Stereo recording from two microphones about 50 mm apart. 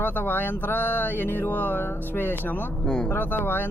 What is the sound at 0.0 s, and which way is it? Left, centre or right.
Speech, left.